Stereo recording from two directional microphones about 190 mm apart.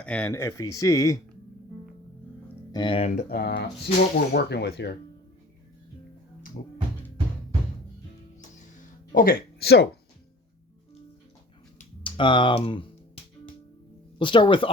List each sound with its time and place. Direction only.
0.0 s speech: 5° left (ahead or behind)
2.7 s speech: 25° left (ahead or behind)
3.2 s speech: 55° left (ahead or behind)
3.9 s speech: 35° left (ahead or behind)
4.3 s speech: 60° left (ahead or behind)
9.1 s speech: 50° left (ahead or behind)
12.0 s speech: 25° left (ahead or behind)
14.2 s speech: 25° left (ahead or behind)